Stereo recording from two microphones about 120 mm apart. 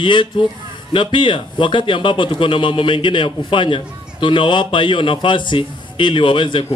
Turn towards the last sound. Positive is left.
turn(degrees=45)  # may be behind; listen again after turning